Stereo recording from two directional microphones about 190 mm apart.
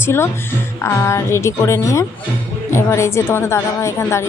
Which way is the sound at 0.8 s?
15° left (ahead or behind).